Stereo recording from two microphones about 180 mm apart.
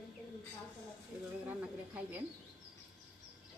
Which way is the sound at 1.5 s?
10° right (ahead or behind).